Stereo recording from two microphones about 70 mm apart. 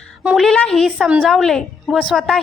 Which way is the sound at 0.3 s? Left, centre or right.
Centre.